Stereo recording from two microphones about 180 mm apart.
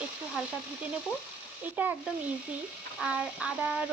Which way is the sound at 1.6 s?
10° right (ahead or behind).